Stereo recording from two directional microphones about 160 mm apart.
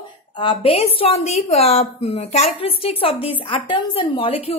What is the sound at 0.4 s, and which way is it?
A woman's voice, 35° left (ahead or behind).